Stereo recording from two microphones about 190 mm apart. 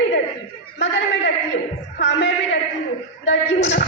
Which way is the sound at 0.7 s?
65° left (ahead or behind).